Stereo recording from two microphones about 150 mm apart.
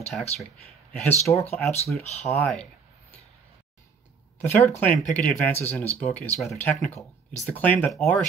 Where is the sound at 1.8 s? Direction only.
50° left (ahead or behind).